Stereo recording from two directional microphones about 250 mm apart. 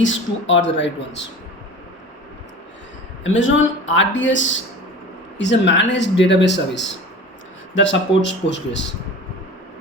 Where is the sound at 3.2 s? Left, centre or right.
Left.